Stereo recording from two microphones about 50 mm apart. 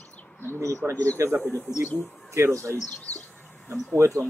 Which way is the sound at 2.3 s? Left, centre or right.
Right.